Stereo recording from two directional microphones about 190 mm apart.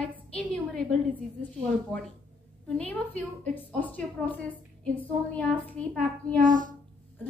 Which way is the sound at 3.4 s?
10° left (ahead or behind).